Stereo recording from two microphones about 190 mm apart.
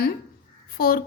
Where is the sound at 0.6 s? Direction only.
50° left (ahead or behind).